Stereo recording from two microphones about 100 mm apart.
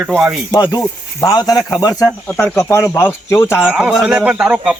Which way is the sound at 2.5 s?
25° left (ahead or behind).